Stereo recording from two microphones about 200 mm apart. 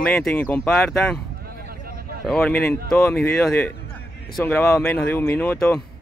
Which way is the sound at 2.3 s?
5° left (ahead or behind).